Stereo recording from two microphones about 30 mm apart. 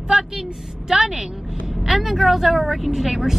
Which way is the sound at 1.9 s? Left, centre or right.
Centre.